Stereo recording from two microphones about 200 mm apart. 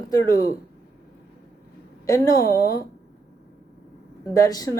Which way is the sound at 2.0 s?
15° left (ahead or behind).